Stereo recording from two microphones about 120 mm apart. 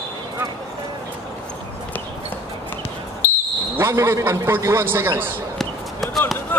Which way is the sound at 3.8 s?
25° right (ahead or behind).